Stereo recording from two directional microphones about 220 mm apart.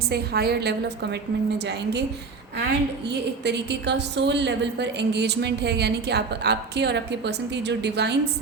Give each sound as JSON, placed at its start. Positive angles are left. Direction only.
{"t": 0.1, "sound": "a woman's voice", "side_deg": -45}
{"t": 3.1, "sound": "a woman's voice", "side_deg": -50}